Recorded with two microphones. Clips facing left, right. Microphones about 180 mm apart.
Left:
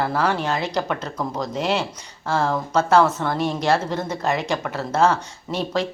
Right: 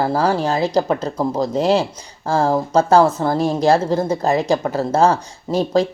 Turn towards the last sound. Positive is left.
turn(degrees=-35)  # may be behind; listen again after turning